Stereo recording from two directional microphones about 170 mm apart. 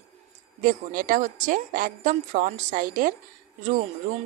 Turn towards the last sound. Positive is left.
turn(degrees=-45)  # may be behind; listen again after turning